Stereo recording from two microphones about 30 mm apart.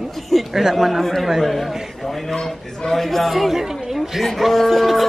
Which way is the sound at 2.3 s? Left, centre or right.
Centre.